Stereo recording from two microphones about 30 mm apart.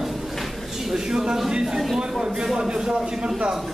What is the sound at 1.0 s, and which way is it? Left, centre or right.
Speech, right.